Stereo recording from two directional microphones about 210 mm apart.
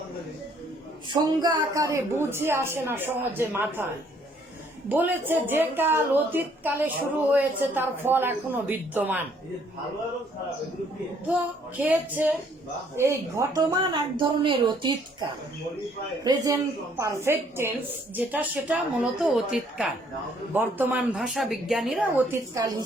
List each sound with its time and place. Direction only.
1.1 s a woman's voice: 20° right (ahead or behind)
4.9 s a woman's voice: 10° right (ahead or behind)
11.8 s a woman's voice: 5° right (ahead or behind)
16.2 s a woman's voice: 15° right (ahead or behind)